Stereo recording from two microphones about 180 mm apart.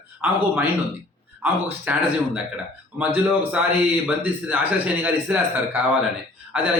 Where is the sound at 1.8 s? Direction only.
10° right (ahead or behind).